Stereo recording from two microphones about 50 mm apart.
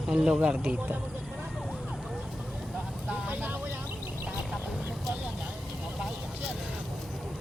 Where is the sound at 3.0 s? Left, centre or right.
Right.